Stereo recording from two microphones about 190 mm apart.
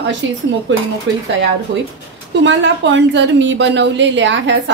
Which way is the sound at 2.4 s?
70° right (ahead or behind).